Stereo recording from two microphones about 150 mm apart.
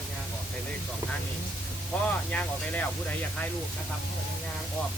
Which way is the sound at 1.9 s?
10° left (ahead or behind).